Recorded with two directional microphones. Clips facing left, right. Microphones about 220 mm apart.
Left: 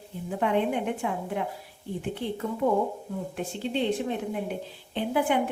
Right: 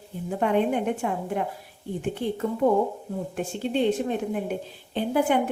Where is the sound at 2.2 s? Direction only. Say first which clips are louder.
Right 4 dB; 45° right (ahead or behind).